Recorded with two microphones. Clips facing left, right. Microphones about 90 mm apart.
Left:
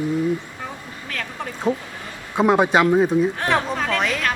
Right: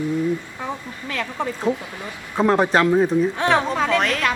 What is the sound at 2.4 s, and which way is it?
A woman's voice, 10° left (ahead or behind).